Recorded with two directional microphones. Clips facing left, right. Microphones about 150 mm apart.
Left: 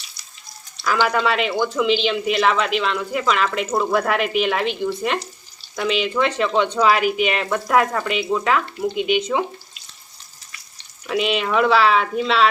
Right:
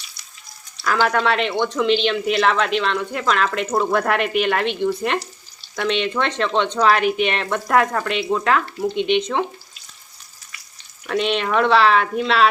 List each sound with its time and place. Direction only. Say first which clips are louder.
0.8 s speech: even; 5° left (ahead or behind)
11.0 s speech: even; 5° left (ahead or behind)